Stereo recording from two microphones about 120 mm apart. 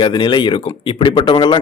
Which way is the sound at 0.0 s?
40° left (ahead or behind).